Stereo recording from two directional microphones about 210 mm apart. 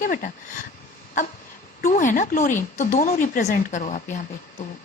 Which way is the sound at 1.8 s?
35° left (ahead or behind).